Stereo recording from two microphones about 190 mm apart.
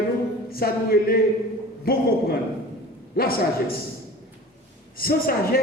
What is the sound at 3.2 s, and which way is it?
Speech, 50° left (ahead or behind).